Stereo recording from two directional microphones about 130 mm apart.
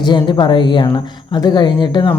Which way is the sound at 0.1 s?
35° left (ahead or behind).